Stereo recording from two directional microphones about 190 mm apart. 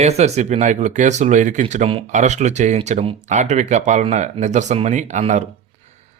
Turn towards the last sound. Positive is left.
turn(degrees=-40)  # may be behind; listen again after turning